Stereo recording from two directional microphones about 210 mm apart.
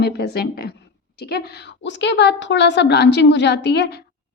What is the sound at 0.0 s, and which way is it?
A woman's voice, 50° left (ahead or behind).